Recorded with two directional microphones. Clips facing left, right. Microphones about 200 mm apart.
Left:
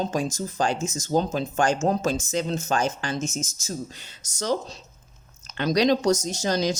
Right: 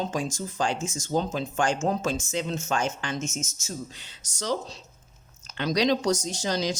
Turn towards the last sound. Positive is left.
turn(degrees=45)  # may be behind; listen again after turning